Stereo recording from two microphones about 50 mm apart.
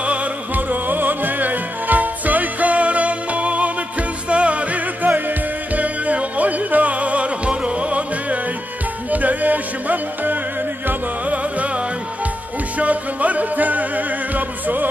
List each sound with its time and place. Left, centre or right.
0.0 s music: right